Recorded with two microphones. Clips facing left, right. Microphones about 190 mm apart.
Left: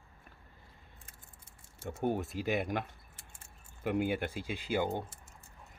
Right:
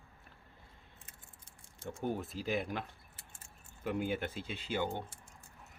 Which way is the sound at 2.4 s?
65° left (ahead or behind).